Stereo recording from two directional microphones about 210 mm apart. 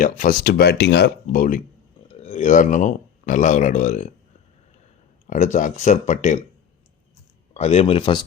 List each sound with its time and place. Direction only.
0.0 s speech: 40° left (ahead or behind)
5.2 s speech: 35° left (ahead or behind)
7.5 s speech: 30° left (ahead or behind)